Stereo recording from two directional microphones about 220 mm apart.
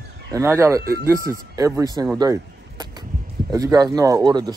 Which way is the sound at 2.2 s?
15° right (ahead or behind).